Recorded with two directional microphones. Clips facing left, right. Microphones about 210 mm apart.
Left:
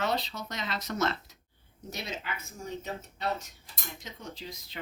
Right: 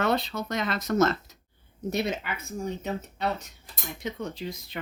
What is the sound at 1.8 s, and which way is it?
Speech, 55° right (ahead or behind).